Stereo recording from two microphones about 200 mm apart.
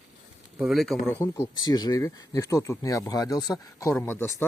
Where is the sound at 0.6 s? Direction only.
Centre (ahead or behind).